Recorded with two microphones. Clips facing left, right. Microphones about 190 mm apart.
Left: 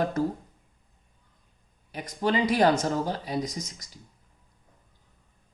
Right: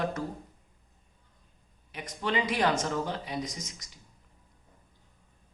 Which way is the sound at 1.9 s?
35° left (ahead or behind).